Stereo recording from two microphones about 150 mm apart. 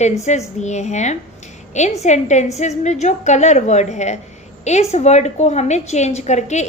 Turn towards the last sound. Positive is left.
turn(degrees=50)  # may be behind; listen again after turning